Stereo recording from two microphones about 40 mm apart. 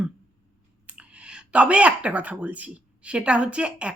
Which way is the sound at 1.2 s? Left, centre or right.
Right.